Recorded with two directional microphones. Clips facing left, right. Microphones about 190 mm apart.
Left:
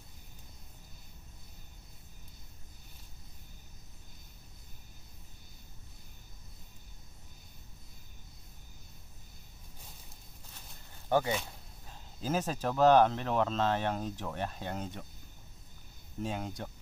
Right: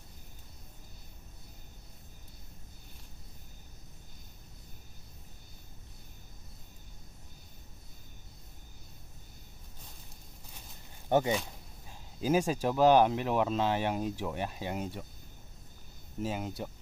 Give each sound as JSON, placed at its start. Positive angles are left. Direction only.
{"t": 11.1, "sound": "speech", "side_deg": -20}
{"t": 16.2, "sound": "speech", "side_deg": -5}